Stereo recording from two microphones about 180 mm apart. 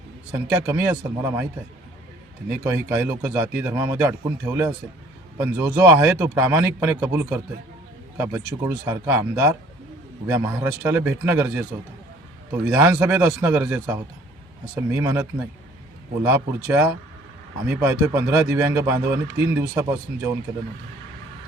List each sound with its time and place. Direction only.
0.3 s a man's voice: 15° right (ahead or behind)
2.5 s a man's voice: 10° right (ahead or behind)